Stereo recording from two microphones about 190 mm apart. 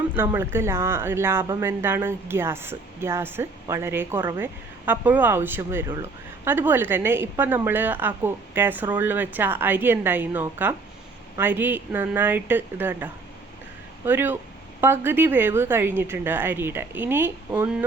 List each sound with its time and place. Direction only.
0.2 s a woman's voice: 10° right (ahead or behind)